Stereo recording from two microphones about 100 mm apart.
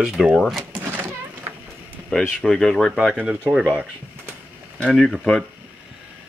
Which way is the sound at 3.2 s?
15° right (ahead or behind).